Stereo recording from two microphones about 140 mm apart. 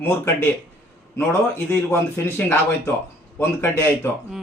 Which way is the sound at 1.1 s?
20° left (ahead or behind).